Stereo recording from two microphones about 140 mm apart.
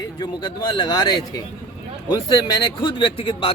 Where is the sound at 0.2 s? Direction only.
30° left (ahead or behind).